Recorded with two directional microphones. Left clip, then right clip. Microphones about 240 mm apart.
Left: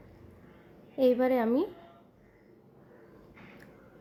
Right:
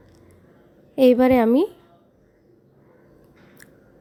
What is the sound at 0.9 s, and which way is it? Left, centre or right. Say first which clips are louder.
Speech: right 10 dB; right.